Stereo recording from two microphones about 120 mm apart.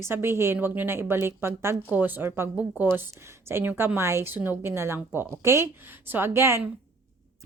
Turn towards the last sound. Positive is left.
turn(degrees=-20)  # may be behind; listen again after turning